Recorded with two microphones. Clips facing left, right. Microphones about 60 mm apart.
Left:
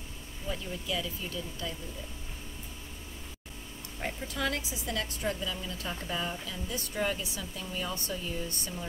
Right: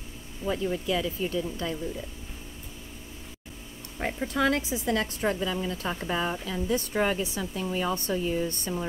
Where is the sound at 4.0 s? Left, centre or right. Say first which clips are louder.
Right 7 dB; right.